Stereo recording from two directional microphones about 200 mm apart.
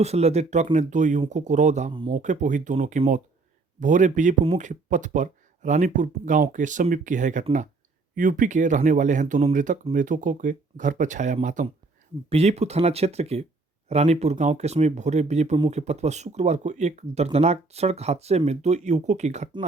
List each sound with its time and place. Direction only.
0.0 s speech: 30° right (ahead or behind)